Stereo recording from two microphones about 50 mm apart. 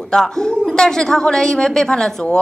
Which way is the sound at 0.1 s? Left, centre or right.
Centre.